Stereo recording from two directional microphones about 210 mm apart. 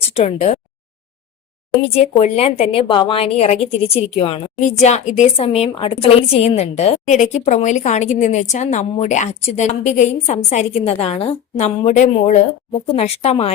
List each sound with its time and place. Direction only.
0.1 s speech: 30° left (ahead or behind)
2.0 s a woman's voice: 30° left (ahead or behind)